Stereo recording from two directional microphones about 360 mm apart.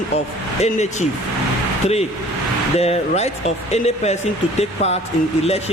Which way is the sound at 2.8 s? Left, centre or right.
Centre.